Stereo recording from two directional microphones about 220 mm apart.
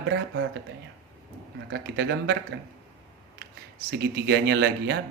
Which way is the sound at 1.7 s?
50° right (ahead or behind).